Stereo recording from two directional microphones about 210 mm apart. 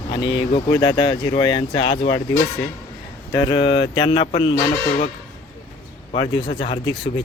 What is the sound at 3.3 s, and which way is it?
Speech, 20° left (ahead or behind).